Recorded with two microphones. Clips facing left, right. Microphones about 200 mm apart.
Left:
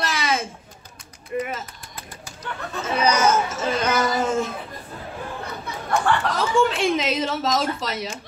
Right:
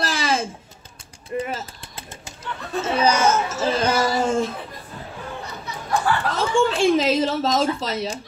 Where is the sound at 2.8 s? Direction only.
30° right (ahead or behind).